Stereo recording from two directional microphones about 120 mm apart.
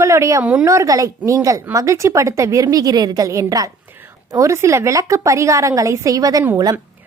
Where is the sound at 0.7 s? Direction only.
25° right (ahead or behind).